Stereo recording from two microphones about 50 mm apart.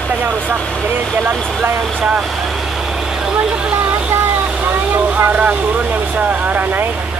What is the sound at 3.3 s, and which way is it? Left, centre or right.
Vehicle, right.